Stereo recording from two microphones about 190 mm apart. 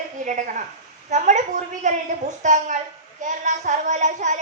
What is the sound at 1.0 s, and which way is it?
A woman's voice, 40° right (ahead or behind).